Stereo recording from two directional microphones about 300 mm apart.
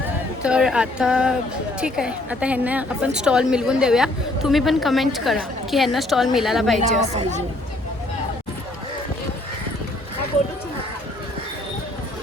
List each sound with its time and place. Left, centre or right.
0.4 s a woman's voice: centre
6.7 s a woman's voice: right